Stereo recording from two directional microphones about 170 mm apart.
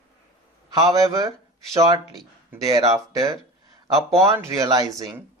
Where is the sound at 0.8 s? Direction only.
20° right (ahead or behind).